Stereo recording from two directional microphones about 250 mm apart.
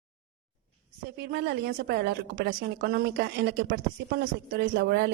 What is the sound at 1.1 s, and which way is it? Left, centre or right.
A woman's voice, right.